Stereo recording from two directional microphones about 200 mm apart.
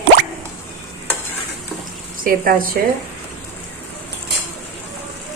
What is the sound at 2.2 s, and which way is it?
Speech, 45° right (ahead or behind).